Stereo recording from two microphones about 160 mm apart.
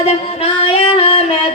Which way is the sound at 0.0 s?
40° left (ahead or behind).